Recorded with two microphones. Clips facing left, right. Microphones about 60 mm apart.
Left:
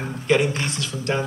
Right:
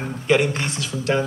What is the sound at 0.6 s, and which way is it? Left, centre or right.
Speech, right.